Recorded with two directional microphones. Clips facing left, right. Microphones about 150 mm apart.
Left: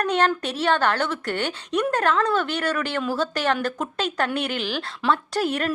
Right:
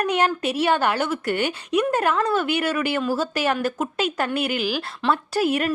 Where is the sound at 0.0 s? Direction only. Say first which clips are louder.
Even; 10° right (ahead or behind).